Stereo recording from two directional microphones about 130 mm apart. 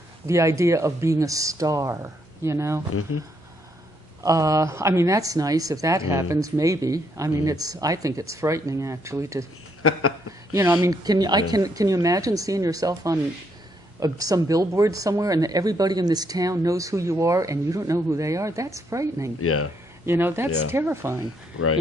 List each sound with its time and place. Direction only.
0.3 s speech: 25° right (ahead or behind)
4.2 s speech: 25° right (ahead or behind)
10.5 s speech: 20° right (ahead or behind)